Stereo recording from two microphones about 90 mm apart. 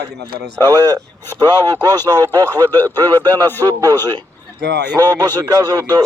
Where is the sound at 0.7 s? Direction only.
45° right (ahead or behind).